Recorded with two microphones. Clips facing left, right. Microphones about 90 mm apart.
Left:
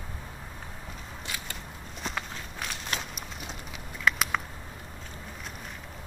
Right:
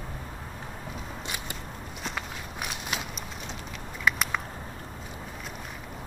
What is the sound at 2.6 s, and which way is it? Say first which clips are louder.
Walk: right 1 dB; 10° right (ahead or behind).